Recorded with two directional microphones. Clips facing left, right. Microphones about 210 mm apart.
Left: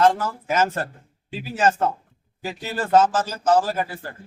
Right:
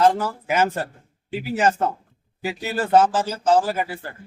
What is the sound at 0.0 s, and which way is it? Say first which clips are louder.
Speech: even; 10° right (ahead or behind).